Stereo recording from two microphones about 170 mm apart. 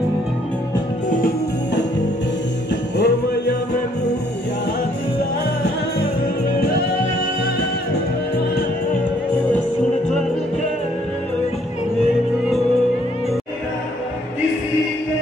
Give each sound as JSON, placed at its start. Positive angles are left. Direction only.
{"t": 2.7, "sound": "music", "side_deg": 80}